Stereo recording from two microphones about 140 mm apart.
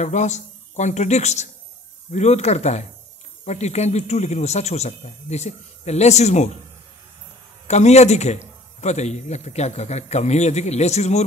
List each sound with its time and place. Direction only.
0.0 s a man's voice: 55° left (ahead or behind)
7.6 s speech: 55° left (ahead or behind)